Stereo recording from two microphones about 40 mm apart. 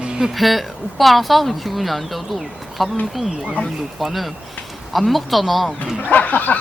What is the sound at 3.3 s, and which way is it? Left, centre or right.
Speech, centre.